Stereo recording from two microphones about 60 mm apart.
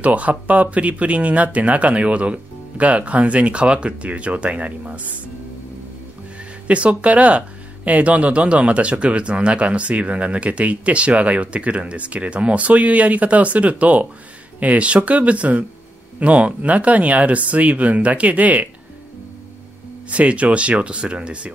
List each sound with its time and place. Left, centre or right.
0.0 s speech: right
6.7 s speech: right
20.1 s speech: right